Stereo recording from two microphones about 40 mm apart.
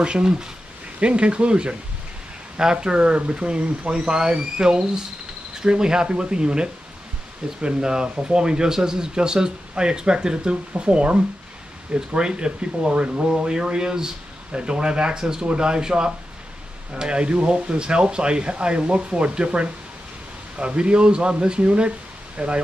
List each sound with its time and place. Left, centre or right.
0.0 s speech: right